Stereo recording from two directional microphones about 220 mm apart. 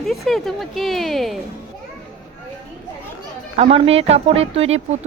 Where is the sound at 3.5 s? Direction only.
25° right (ahead or behind).